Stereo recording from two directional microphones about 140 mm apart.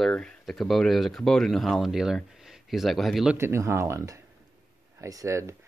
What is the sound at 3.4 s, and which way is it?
Speech, 20° right (ahead or behind).